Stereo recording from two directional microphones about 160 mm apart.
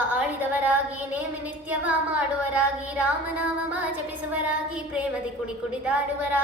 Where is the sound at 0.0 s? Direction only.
10° right (ahead or behind).